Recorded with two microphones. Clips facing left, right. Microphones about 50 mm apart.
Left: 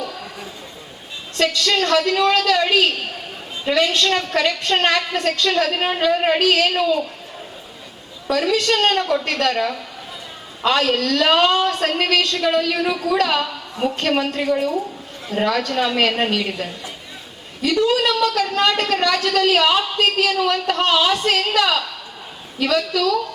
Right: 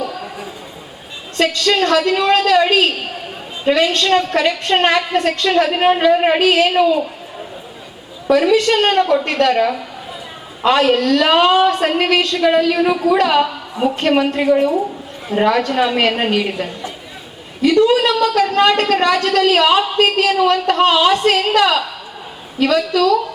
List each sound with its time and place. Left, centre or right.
0.0 s a sound: centre
1.5 s a woman's voice: centre
8.3 s a woman's voice: centre